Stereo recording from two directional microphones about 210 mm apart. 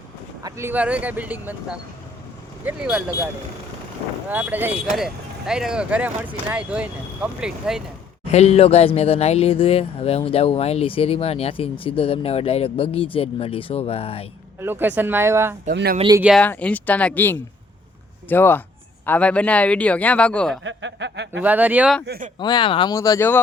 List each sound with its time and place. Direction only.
0.4 s speech: 10° right (ahead or behind)
4.3 s speech: 10° right (ahead or behind)
8.3 s speech: 30° left (ahead or behind)
14.6 s speech: 10° right (ahead or behind)
15.7 s speech: 50° right (ahead or behind)
16.0 s speech: 20° right (ahead or behind)
16.2 s speech: 5° left (ahead or behind)
20.7 s speech: 60° right (ahead or behind)
21.4 s speech: 5° right (ahead or behind)
22.0 s speech: 50° right (ahead or behind)
22.4 s speech: 20° left (ahead or behind)